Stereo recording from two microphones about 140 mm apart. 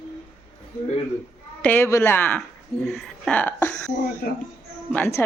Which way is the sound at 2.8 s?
Centre (ahead or behind).